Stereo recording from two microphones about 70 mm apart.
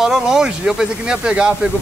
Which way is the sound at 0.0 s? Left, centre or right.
Centre.